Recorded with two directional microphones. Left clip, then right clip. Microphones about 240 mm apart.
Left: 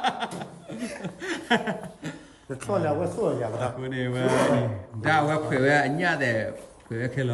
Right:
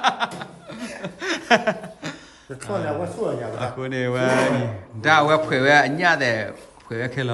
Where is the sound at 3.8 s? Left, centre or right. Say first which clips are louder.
Right 6 dB; centre.